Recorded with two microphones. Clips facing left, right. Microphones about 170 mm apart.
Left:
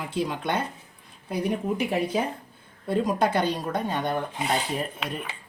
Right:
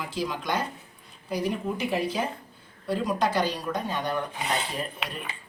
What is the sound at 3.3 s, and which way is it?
Speech, 60° left (ahead or behind).